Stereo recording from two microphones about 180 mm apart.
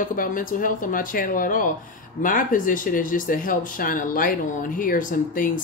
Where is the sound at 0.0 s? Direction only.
50° left (ahead or behind).